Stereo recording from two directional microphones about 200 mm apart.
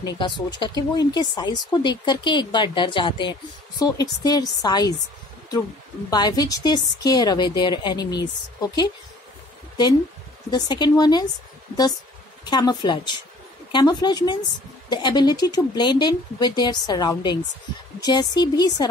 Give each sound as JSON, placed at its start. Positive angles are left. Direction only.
{"t": 0.0, "sound": "speech", "side_deg": 20}
{"t": 6.0, "sound": "speech", "side_deg": 20}
{"t": 10.5, "sound": "speech", "side_deg": 20}
{"t": 12.4, "sound": "speech", "side_deg": 20}